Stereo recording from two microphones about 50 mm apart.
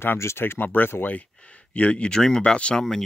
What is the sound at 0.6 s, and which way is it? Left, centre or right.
Speech, left.